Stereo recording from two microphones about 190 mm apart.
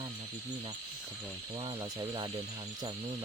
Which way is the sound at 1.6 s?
25° right (ahead or behind).